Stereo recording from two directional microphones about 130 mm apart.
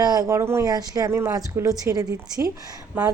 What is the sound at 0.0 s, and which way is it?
Speech, 30° right (ahead or behind).